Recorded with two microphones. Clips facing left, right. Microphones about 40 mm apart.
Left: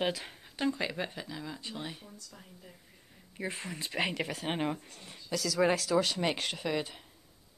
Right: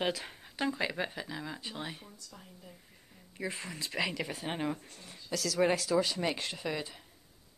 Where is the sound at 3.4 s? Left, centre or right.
Left.